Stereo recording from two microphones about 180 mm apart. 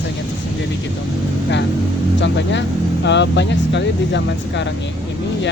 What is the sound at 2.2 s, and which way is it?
Speech, 80° left.